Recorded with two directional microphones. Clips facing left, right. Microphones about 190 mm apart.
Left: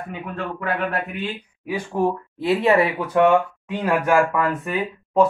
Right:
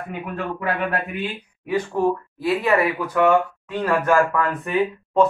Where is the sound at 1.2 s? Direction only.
10° left (ahead or behind).